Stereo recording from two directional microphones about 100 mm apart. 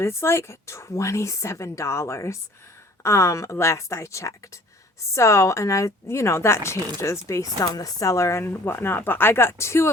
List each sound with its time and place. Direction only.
0.0 s speech: 25° left (ahead or behind)